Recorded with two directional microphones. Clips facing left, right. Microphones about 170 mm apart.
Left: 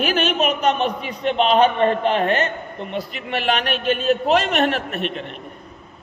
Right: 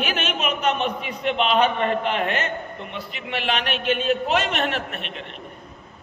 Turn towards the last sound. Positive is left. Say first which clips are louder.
# left 5 dB
turn(degrees=40)  # may be behind; listen again after turning